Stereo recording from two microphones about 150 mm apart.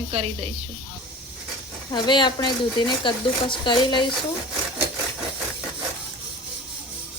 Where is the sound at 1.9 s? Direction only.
30° left (ahead or behind).